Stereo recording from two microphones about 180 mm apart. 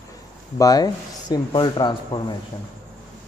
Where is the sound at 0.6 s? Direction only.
20° left (ahead or behind).